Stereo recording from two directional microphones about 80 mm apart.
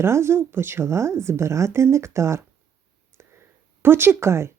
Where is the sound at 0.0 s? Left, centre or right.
Right.